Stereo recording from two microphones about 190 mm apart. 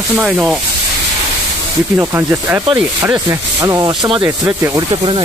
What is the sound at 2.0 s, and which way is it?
Speech, 15° right (ahead or behind).